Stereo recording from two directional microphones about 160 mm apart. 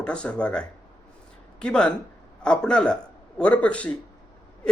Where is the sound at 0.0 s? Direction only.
5° left (ahead or behind).